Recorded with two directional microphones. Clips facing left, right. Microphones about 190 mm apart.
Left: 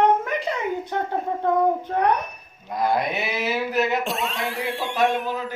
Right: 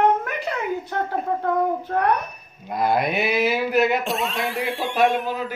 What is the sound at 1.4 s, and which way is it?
Speech, 20° left (ahead or behind).